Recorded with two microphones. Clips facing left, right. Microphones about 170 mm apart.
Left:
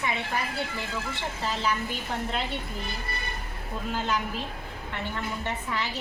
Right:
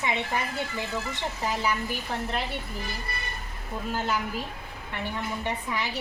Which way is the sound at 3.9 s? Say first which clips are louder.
Even; 10° right (ahead or behind).